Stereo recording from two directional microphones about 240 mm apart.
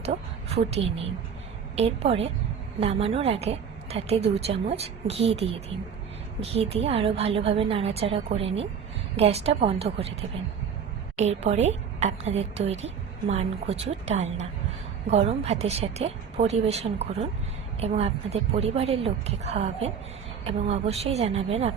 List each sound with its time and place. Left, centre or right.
0.0 s a woman's voice: right